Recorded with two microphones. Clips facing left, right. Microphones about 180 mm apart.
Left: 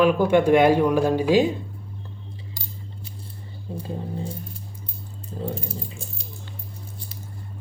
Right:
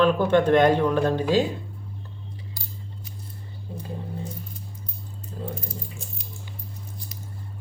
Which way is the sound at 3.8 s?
30° left (ahead or behind).